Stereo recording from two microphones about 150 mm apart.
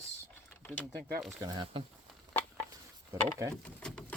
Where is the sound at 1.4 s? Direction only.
30° right (ahead or behind).